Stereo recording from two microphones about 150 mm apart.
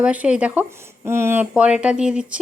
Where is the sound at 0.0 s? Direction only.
10° right (ahead or behind).